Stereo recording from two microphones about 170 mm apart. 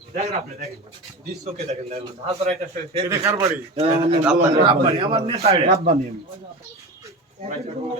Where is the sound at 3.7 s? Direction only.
35° right (ahead or behind).